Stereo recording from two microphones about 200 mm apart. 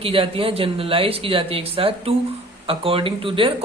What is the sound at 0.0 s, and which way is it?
Speech, 30° right (ahead or behind).